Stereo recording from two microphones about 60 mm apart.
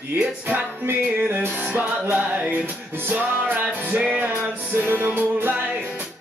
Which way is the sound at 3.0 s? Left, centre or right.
Right.